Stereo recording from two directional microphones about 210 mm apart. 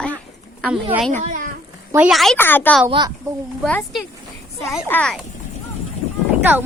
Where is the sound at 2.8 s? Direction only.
20° right (ahead or behind).